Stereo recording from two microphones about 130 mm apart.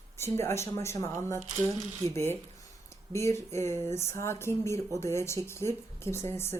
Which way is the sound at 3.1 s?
20° left (ahead or behind).